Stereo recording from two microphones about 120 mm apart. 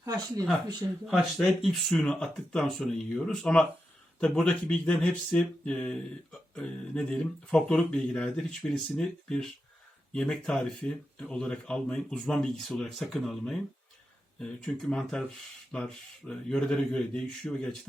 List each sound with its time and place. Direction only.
0.0 s speech: 30° right (ahead or behind)
1.0 s speech: centre (ahead or behind)